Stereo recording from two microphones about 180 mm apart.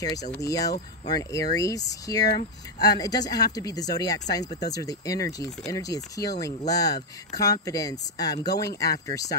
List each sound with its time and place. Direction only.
0.0 s speech: 20° left (ahead or behind)